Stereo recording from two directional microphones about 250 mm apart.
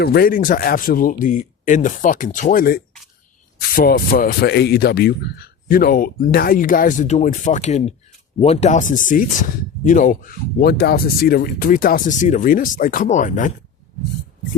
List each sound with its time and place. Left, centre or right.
0.0 s speech: left